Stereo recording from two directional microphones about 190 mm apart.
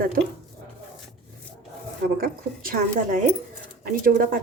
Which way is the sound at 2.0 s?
50° right (ahead or behind).